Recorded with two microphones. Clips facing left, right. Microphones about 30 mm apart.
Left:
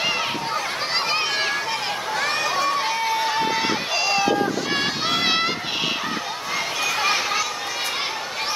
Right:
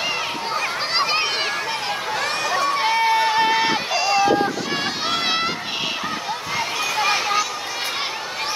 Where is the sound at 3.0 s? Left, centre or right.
Right.